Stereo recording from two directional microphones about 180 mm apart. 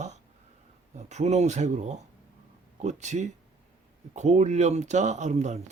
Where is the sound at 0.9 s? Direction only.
40° right (ahead or behind).